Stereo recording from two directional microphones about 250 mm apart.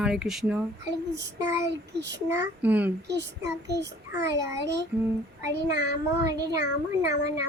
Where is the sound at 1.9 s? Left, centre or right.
Right.